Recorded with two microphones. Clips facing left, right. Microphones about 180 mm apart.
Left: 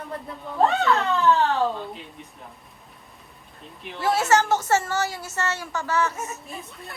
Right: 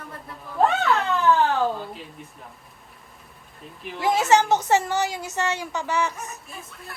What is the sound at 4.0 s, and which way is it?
A woman's voice, 15° right (ahead or behind).